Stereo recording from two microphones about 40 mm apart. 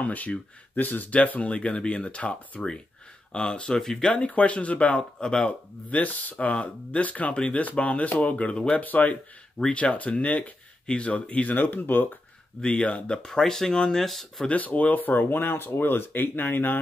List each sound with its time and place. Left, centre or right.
0.0 s speech: left
3.3 s speech: left
3.8 s speech: centre
4.1 s speech: left
6.4 s speech: left
7.3 s speech: left
8.8 s speech: left
11.5 s speech: left
12.6 s speech: left
13.2 s speech: centre
14.5 s speech: left